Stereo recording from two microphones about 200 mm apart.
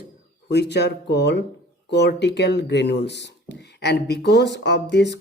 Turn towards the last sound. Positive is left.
turn(degrees=60)  # may be behind; listen again after turning